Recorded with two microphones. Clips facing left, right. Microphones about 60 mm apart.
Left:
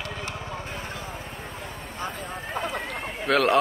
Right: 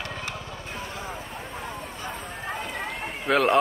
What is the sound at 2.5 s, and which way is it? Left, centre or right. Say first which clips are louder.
Run: left 7 dB; left.